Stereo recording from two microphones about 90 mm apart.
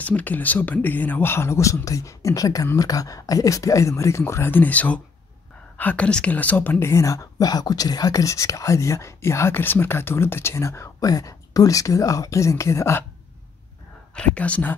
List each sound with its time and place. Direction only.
0.0 s a woman's voice: 20° left (ahead or behind)
14.1 s speech: 15° left (ahead or behind)